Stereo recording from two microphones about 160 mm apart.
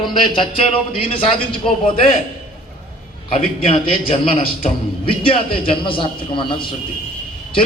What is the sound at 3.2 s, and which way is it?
A man's voice, 35° left (ahead or behind).